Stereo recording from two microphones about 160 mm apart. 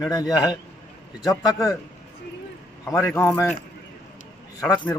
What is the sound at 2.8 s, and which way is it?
Speech, 15° left (ahead or behind).